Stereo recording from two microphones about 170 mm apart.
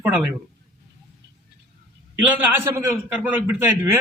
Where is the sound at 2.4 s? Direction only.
15° right (ahead or behind).